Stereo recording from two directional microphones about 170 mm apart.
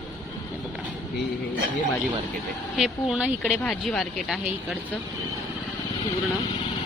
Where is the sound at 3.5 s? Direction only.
5° left (ahead or behind).